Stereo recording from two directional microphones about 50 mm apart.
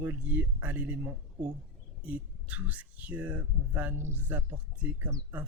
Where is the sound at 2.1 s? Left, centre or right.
Right.